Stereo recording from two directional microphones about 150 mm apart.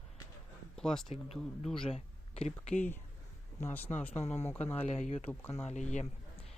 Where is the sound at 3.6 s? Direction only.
15° left (ahead or behind).